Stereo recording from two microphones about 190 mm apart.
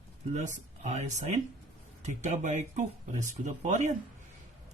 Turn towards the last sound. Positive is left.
turn(degrees=-40)  # may be behind; listen again after turning